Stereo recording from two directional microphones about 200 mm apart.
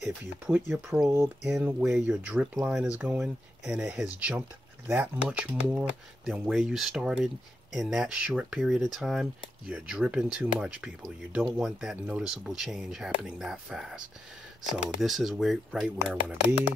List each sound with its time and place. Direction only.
0.0 s speech: 10° right (ahead or behind)